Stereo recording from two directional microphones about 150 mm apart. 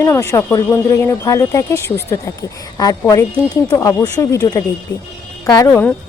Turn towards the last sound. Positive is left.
turn(degrees=10)  # may be behind; listen again after turning